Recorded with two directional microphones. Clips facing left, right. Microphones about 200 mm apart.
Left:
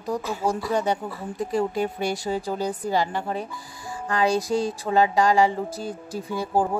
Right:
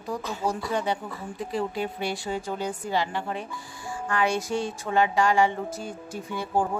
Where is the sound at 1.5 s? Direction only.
45° left (ahead or behind).